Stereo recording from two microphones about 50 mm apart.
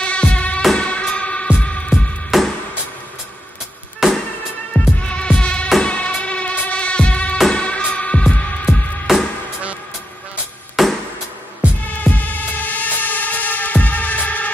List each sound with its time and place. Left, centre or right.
0.0 s music: left
4.0 s music: centre
5.0 s mosquito: left
5.8 s music: left
8.6 s music: centre
10.8 s a sound: centre
11.8 s music: left